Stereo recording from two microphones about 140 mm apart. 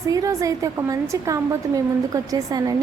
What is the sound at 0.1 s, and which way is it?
Speech, 25° right (ahead or behind).